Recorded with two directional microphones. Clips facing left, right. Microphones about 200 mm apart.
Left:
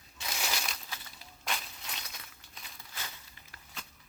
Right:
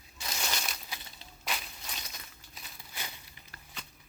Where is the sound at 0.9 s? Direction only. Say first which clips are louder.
Right 1 dB; 25° right (ahead or behind).